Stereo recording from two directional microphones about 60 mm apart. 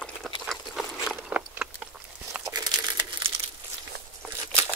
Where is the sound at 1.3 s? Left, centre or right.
Right.